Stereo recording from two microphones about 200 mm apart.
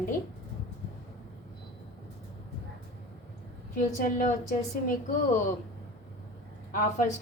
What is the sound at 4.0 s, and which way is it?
Speech, 40° left (ahead or behind).